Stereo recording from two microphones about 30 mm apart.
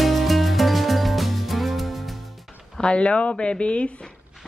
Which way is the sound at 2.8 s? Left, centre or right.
Left.